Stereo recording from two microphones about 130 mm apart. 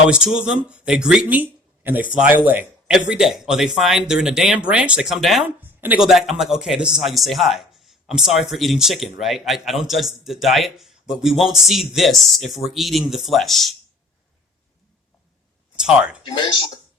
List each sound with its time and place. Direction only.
0.1 s speech: 5° right (ahead or behind)
15.7 s a sound: 5° right (ahead or behind)
16.2 s speech: 35° left (ahead or behind)